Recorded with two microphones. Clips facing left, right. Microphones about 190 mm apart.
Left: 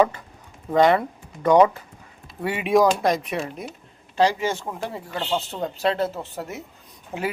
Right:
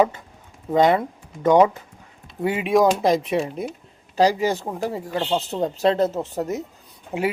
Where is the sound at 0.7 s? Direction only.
20° right (ahead or behind).